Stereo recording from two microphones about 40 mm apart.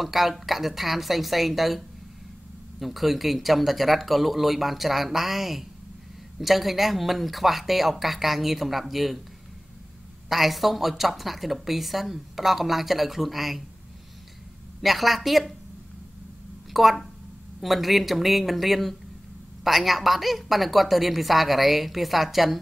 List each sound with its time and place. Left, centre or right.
0.0 s a woman's voice: centre
2.8 s a woman's voice: centre
10.3 s a woman's voice: centre
14.8 s a woman's voice: centre
16.7 s a woman's voice: centre